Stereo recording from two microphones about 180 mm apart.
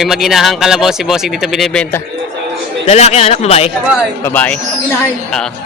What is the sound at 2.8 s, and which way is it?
Speech, 35° left (ahead or behind).